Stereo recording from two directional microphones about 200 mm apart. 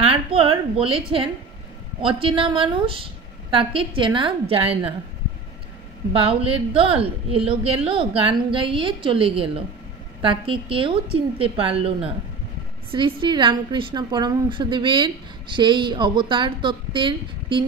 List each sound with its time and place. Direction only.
0.0 s a woman's voice: 30° right (ahead or behind)
6.1 s a woman's voice: 30° right (ahead or behind)